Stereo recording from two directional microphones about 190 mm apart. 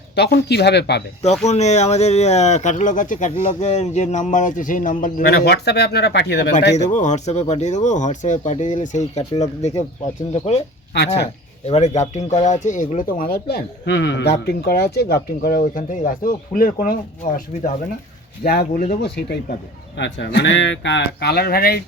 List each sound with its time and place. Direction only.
0.2 s speech: 60° left (ahead or behind)
1.2 s speech: 35° left (ahead or behind); by 6.5 s 60° left (ahead or behind)
6.7 s speech: 40° left (ahead or behind)
10.9 s speech: 65° left (ahead or behind)
11.6 s speech: 35° left (ahead or behind)
18.4 s speech: 55° left (ahead or behind)
20.0 s speech: 70° left (ahead or behind); by 21.8 s 55° left (ahead or behind)